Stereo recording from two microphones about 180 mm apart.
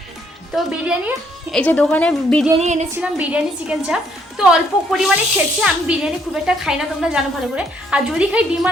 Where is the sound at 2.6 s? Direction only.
40° right (ahead or behind).